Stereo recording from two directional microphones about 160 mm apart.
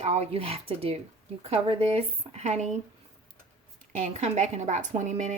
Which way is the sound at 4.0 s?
45° right (ahead or behind).